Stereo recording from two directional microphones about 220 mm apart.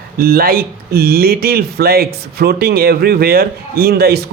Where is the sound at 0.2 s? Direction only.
45° right (ahead or behind).